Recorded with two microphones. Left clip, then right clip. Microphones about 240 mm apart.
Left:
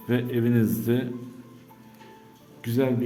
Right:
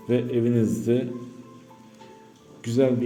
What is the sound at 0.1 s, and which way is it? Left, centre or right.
Speech, centre.